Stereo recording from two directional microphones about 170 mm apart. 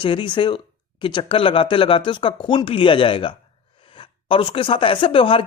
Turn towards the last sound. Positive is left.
turn(degrees=30)  # may be behind; listen again after turning